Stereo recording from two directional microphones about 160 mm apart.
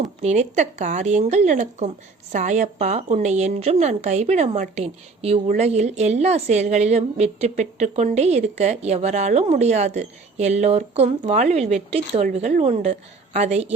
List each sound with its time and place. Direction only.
0.0 s a woman's voice: 45° right (ahead or behind)